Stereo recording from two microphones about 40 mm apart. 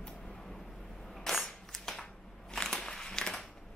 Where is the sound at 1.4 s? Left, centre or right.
Centre.